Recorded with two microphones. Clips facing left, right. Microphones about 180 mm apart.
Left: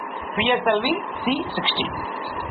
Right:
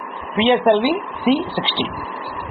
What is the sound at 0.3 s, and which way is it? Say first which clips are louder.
Speech: right 6 dB; 30° right (ahead or behind).